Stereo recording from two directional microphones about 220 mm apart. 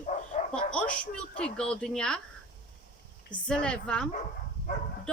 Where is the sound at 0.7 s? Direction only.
5° left (ahead or behind).